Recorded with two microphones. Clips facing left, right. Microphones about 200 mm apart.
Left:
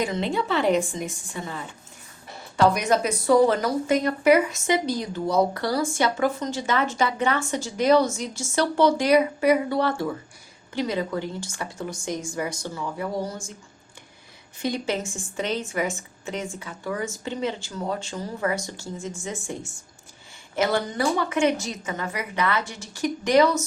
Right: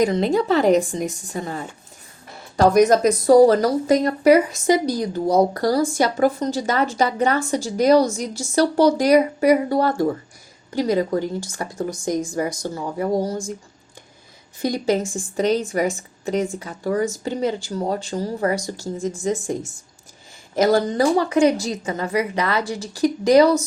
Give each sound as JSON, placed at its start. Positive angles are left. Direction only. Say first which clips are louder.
{"t": 0.0, "sound": "speech", "louder": "right 7 dB", "side_deg": -40}
{"t": 14.6, "sound": "speech", "louder": "right 6 dB", "side_deg": -40}
{"t": 20.6, "sound": "speech", "louder": "right 7 dB", "side_deg": -40}